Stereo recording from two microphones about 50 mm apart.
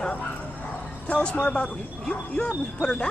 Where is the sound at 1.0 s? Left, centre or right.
Left.